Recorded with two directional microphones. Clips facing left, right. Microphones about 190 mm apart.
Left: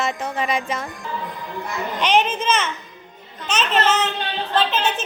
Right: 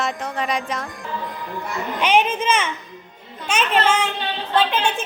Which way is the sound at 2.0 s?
10° right (ahead or behind).